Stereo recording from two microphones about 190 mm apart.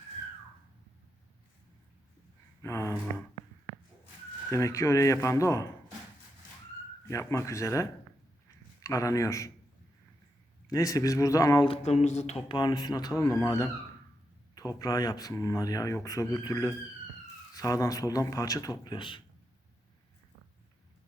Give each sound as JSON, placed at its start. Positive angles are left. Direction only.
{"t": 2.6, "sound": "a sound", "side_deg": 15}
{"t": 4.5, "sound": "speech", "side_deg": 15}
{"t": 7.1, "sound": "speech", "side_deg": 15}
{"t": 8.4, "sound": "a sound", "side_deg": 15}
{"t": 10.7, "sound": "speech", "side_deg": 15}
{"t": 11.7, "sound": "speech", "side_deg": 35}
{"t": 12.5, "sound": "speech", "side_deg": 20}